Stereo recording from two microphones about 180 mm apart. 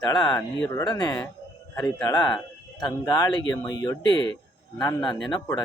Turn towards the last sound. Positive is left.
turn(degrees=25)  # may be behind; listen again after turning